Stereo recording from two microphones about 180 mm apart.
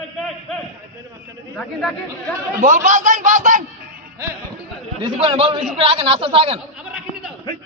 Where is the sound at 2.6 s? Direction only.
45° right (ahead or behind).